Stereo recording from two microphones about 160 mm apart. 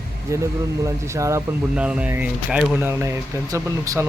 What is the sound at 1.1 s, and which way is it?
Speech, 20° right (ahead or behind).